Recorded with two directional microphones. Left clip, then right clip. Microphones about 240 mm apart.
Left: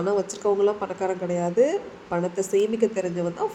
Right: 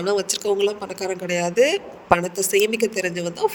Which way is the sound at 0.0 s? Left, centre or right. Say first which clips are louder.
Right 2 dB; right.